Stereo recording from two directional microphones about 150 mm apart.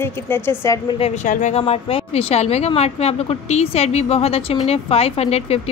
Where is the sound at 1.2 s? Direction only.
55° left (ahead or behind).